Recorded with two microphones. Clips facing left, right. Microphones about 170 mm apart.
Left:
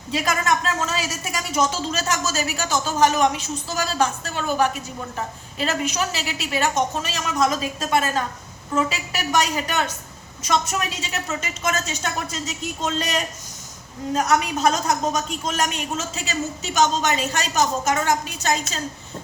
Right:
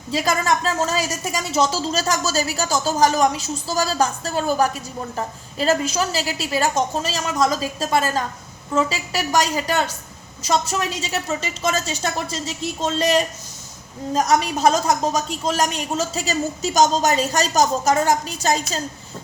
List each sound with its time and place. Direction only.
0.1 s a woman's voice: 35° right (ahead or behind)